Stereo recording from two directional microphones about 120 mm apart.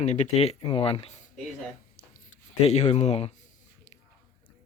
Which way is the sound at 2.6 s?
65° left (ahead or behind).